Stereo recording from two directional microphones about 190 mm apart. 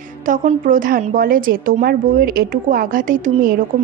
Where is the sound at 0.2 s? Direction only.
40° right (ahead or behind).